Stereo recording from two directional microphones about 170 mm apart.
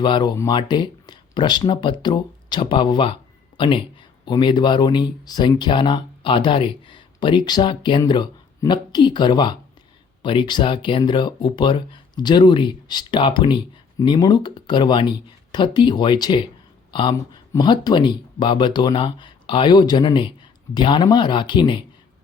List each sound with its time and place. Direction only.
0.0 s speech: 25° left (ahead or behind)